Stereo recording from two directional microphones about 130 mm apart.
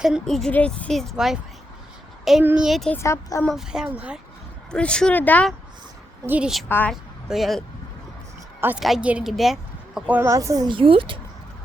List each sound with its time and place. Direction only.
0.0 s speech: centre (ahead or behind)
2.4 s speech: 15° right (ahead or behind)
2.6 s speech: centre (ahead or behind)
2.9 s speech: 20° left (ahead or behind)
3.5 s speech: 5° right (ahead or behind)
4.7 s speech: 5° left (ahead or behind)
6.2 s speech: 10° right (ahead or behind)
6.7 s speech: 15° left (ahead or behind)
6.9 s a woman's voice: centre (ahead or behind)
8.8 s speech: 5° right (ahead or behind)
10.1 s speech: 15° right (ahead or behind)
10.3 s a woman's voice: 25° right (ahead or behind); by 11.2 s 40° right (ahead or behind)